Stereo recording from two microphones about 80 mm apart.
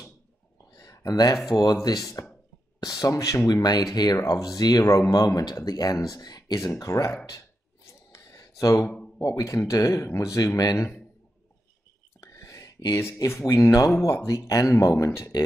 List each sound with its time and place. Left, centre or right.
0.7 s a sound: left
1.5 s speech: left
2.2 s speech: left
2.8 s speech: left
3.6 s speech: left
6.6 s speech: left
7.3 s a sound: left
9.2 s speech: left
12.2 s a sound: left
13.2 s speech: left